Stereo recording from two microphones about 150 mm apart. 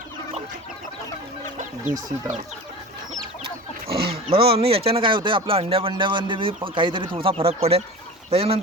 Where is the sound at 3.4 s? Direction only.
40° right (ahead or behind).